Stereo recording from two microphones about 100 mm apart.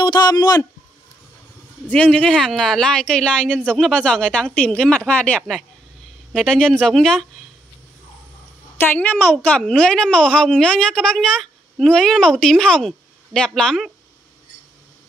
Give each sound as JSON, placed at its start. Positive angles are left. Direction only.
{"t": 0.0, "sound": "speech", "side_deg": 45}
{"t": 1.9, "sound": "a woman's voice", "side_deg": 10}
{"t": 8.7, "sound": "a woman's voice", "side_deg": 20}